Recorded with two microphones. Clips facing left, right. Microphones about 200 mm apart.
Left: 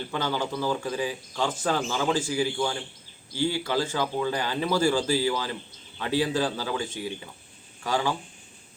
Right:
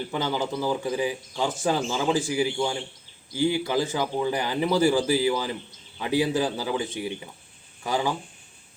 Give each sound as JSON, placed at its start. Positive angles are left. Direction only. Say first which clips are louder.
{"t": 0.1, "sound": "speech", "louder": "even", "side_deg": -15}